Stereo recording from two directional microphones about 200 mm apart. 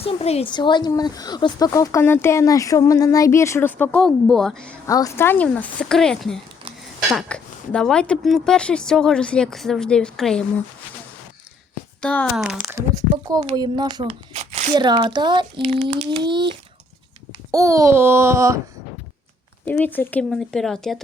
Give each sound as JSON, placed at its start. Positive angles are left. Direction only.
{"t": 0.0, "sound": "speech", "side_deg": 30}
{"t": 4.9, "sound": "a woman's voice", "side_deg": 15}
{"t": 11.9, "sound": "speech", "side_deg": 5}
{"t": 14.1, "sound": "a sound", "side_deg": -35}
{"t": 14.8, "sound": "speech", "side_deg": -20}
{"t": 15.9, "sound": "speech", "side_deg": -35}
{"t": 16.2, "sound": "speech", "side_deg": -25}
{"t": 19.6, "sound": "a woman's voice", "side_deg": 10}